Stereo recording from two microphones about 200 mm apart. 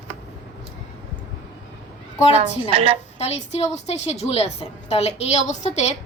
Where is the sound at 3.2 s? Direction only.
30° left (ahead or behind).